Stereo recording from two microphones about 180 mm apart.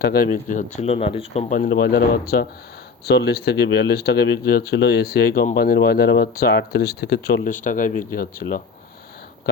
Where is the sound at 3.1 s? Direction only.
65° left (ahead or behind).